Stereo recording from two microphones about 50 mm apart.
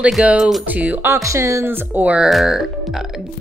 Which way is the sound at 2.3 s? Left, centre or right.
Centre.